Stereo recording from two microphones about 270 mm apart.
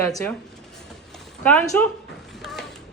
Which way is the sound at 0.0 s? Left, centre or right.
Centre.